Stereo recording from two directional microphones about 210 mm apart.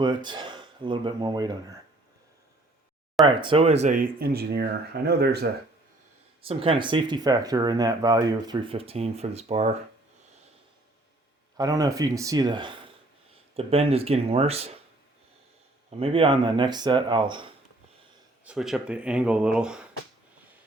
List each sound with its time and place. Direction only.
0.0 s speech: 20° right (ahead or behind)
3.2 s speech: 25° right (ahead or behind); by 5.5 s 50° right (ahead or behind)
6.4 s speech: 25° right (ahead or behind)
11.5 s speech: 15° right (ahead or behind)
15.9 s speech: 30° right (ahead or behind)
18.4 s speech: centre (ahead or behind)